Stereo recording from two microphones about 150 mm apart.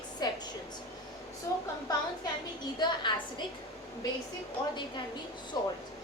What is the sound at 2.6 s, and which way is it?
Speech, 30° left (ahead or behind).